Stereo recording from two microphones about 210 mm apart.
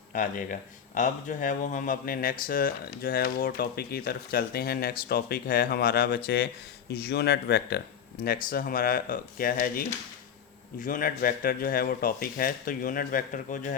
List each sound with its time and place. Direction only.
0.1 s speech: 40° left (ahead or behind)